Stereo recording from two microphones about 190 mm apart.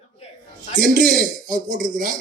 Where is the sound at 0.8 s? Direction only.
45° right (ahead or behind).